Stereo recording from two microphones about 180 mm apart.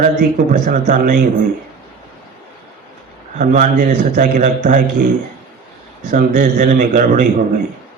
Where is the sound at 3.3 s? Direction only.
45° right (ahead or behind).